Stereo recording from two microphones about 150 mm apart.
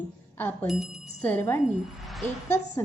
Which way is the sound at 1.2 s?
10° left (ahead or behind).